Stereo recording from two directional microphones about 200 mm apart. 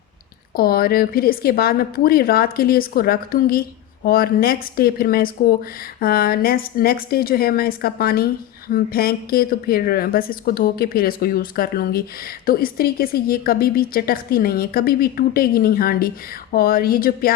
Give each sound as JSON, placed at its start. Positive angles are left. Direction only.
{"t": 0.5, "sound": "a woman's voice", "side_deg": 50}